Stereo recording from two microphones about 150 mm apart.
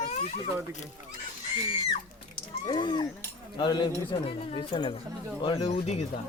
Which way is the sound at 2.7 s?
30° left (ahead or behind).